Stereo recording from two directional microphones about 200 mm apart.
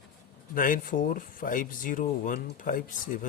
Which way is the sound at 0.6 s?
45° left (ahead or behind).